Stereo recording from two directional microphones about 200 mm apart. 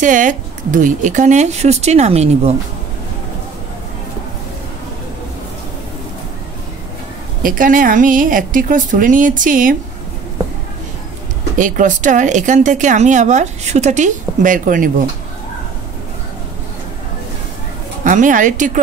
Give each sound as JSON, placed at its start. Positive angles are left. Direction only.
{"t": 0.0, "sound": "speech", "side_deg": -40}
{"t": 7.4, "sound": "a woman's voice", "side_deg": -45}
{"t": 11.5, "sound": "speech", "side_deg": -40}
{"t": 18.0, "sound": "speech", "side_deg": -40}